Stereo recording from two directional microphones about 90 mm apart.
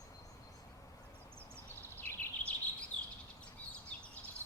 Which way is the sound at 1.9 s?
20° left (ahead or behind).